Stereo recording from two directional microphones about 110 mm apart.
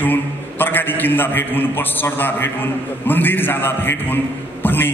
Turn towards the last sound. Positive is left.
turn(degrees=20)  # may be behind; listen again after turning